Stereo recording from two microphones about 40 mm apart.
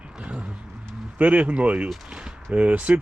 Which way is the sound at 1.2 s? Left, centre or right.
Right.